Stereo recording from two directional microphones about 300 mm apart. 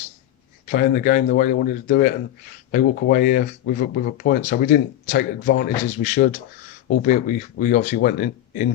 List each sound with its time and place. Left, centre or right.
0.7 s speech: left